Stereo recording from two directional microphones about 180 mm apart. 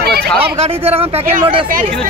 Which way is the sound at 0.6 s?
35° right (ahead or behind).